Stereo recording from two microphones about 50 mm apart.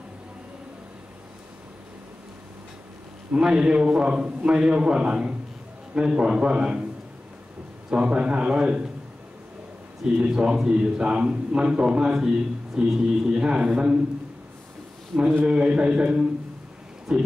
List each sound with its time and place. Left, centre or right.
3.3 s a man's voice: centre
7.9 s a man's voice: right
10.1 s a man's voice: centre
15.4 s a man's voice: centre